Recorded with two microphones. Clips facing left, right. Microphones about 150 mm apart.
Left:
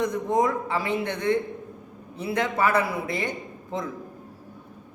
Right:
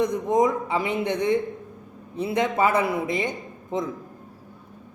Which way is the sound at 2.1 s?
20° right (ahead or behind).